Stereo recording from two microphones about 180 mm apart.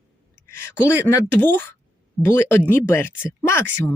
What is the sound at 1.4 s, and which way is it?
Speech, 10° left (ahead or behind).